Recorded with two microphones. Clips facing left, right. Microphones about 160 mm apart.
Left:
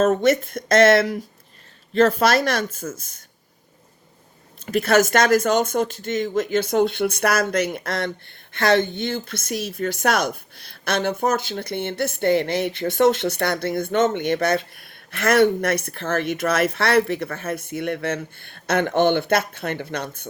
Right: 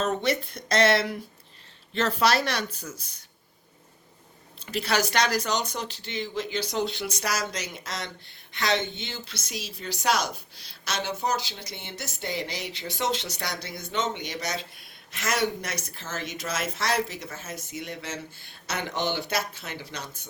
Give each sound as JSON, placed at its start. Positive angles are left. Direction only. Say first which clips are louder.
{"t": 0.0, "sound": "speech", "louder": "left 9 dB", "side_deg": 45}
{"t": 4.6, "sound": "speech", "louder": "left 9 dB", "side_deg": 50}